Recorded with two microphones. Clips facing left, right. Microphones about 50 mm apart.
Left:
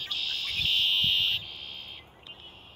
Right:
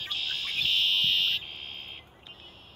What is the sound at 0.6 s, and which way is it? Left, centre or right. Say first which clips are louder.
Fire alarm: even; centre.